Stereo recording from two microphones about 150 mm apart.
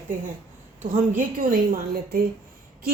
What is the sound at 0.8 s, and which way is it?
Speech, 55° right (ahead or behind).